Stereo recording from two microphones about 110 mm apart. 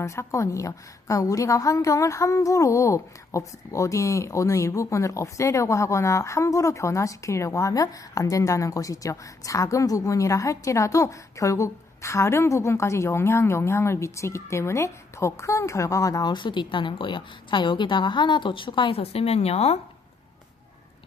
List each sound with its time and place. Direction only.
0.0 s a woman's voice: 25° left (ahead or behind); by 19.8 s 70° left (ahead or behind)